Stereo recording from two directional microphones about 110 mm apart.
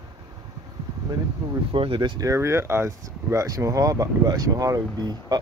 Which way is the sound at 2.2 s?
25° right (ahead or behind).